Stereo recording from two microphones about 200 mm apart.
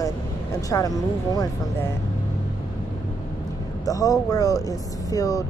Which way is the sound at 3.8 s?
15° left (ahead or behind).